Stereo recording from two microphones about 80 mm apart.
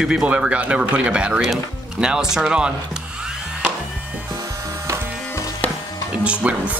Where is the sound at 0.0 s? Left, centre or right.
Centre.